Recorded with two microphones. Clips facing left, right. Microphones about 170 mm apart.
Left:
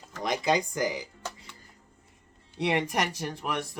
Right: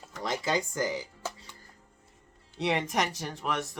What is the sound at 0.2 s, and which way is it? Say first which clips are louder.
Speech: left 3 dB; 15° left (ahead or behind).